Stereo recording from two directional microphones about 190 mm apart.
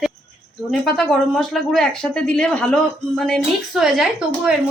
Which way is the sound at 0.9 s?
Centre (ahead or behind).